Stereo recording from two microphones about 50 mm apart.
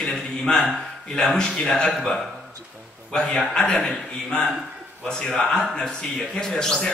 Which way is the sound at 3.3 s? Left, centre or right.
Centre.